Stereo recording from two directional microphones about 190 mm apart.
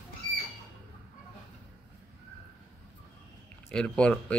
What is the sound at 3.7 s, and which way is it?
Speech, 5° left (ahead or behind).